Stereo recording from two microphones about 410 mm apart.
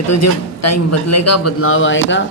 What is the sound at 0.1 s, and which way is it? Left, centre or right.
A man's voice, left.